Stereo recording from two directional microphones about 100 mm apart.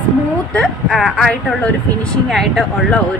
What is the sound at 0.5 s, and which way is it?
Speech, 10° left (ahead or behind).